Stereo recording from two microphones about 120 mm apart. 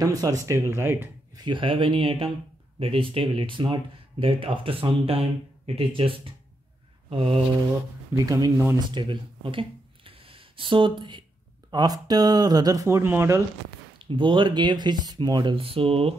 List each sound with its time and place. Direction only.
0.0 s speech: 30° right (ahead or behind)
1.3 s speech: 40° right (ahead or behind)
8.2 s speech: 30° right (ahead or behind)
13.9 s speech: 45° right (ahead or behind)
15.5 s speech: 50° right (ahead or behind)